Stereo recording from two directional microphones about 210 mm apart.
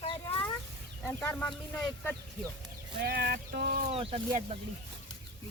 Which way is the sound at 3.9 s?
30° right (ahead or behind).